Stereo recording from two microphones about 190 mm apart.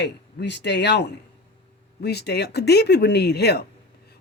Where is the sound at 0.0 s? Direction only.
65° left (ahead or behind).